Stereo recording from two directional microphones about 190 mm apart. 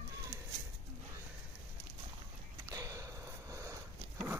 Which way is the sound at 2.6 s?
15° right (ahead or behind).